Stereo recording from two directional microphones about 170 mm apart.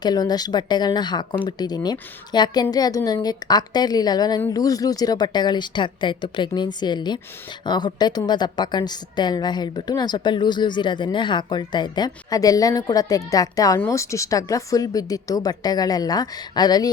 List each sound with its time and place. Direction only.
0.0 s a woman's voice: 25° left (ahead or behind)